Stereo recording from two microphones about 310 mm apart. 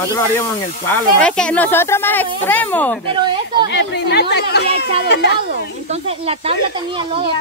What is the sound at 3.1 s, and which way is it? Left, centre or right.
Speech, centre.